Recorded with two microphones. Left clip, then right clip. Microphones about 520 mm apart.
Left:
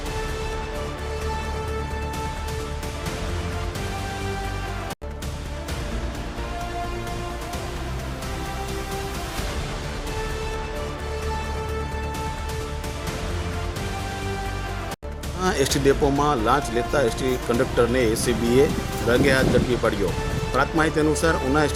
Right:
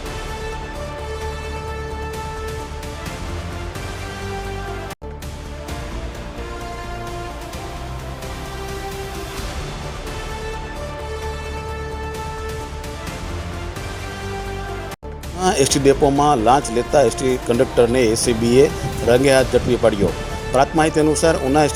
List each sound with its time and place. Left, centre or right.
15.4 s speech: left